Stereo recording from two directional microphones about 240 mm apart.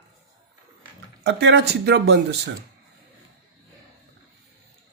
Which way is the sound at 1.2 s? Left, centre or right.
Right.